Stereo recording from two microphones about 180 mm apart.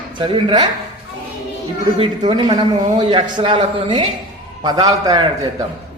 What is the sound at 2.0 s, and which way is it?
A man's voice, 25° right (ahead or behind).